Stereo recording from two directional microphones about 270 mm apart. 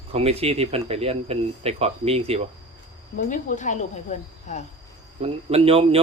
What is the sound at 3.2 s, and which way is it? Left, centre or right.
Speech, left.